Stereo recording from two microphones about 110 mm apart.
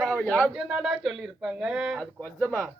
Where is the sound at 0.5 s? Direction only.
5° right (ahead or behind).